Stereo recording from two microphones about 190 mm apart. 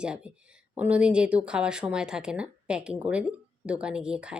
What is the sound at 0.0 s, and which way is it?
Speech, 5° right (ahead or behind).